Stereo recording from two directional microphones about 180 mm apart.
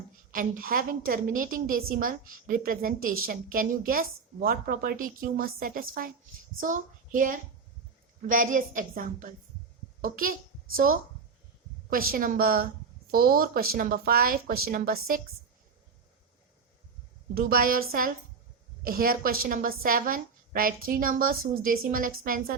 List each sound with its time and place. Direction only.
0.3 s a woman's voice: 50° right (ahead or behind)
11.9 s a woman's voice: 55° right (ahead or behind)
17.3 s a woman's voice: 55° right (ahead or behind)